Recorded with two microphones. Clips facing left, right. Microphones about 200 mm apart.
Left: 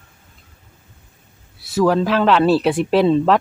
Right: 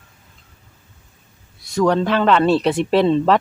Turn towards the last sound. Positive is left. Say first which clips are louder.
# left 1 dB
turn(degrees=0)  # may be behind; listen again after turning